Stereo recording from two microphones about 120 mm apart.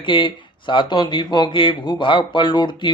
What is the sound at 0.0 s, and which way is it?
Speech, 40° left (ahead or behind).